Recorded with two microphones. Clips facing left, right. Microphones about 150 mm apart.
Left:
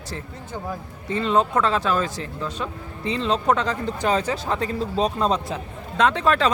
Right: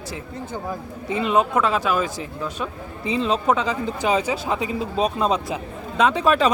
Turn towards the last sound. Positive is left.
turn(degrees=-10)  # may be behind; listen again after turning